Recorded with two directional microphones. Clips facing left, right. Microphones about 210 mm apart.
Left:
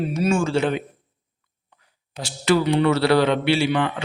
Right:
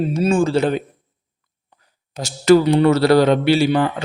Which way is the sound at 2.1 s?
40° right (ahead or behind).